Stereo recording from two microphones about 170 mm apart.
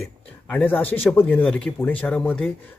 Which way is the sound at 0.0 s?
10° left (ahead or behind).